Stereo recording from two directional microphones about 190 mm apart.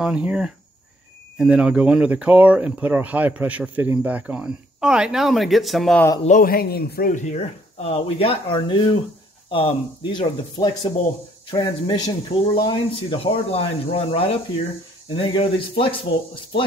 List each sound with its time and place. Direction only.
0.0 s speech: 5° right (ahead or behind)
6.2 s speech: 45° left (ahead or behind); by 16.6 s 25° left (ahead or behind)